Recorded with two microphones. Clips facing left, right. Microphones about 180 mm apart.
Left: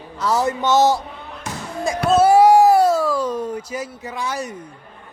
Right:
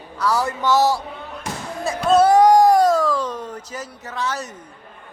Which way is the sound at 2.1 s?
5° left (ahead or behind).